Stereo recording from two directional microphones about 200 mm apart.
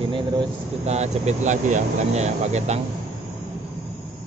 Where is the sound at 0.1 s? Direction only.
25° right (ahead or behind).